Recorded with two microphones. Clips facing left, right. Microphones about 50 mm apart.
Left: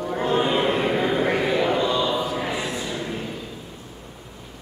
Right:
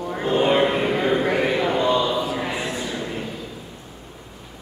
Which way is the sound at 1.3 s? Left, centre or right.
Right.